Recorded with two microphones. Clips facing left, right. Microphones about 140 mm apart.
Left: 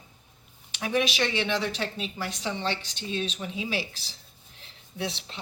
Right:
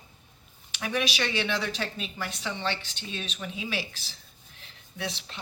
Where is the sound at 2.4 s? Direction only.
35° left (ahead or behind).